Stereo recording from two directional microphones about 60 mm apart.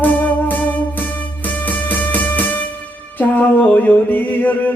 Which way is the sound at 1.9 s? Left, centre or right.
Left.